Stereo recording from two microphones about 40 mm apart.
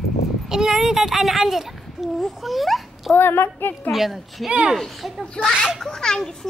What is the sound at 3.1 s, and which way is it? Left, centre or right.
Speech, left.